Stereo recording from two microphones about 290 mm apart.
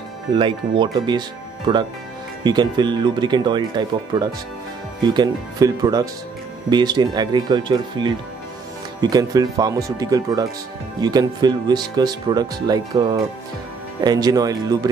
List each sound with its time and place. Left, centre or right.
0.3 s speech: centre